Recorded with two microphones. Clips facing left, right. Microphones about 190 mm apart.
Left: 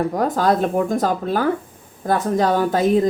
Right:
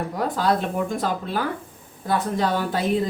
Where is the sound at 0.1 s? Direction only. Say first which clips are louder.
Left 4 dB; 45° left (ahead or behind).